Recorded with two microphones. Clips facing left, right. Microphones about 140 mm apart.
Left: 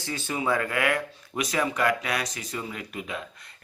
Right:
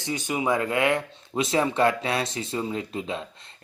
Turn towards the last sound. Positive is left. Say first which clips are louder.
# right 4 dB
turn(degrees=-25)  # may be behind; listen again after turning